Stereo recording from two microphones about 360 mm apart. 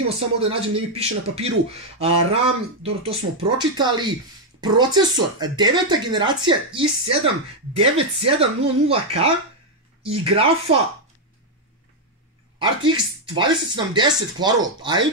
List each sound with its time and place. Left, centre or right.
0.2 s speech: centre
12.5 s speech: centre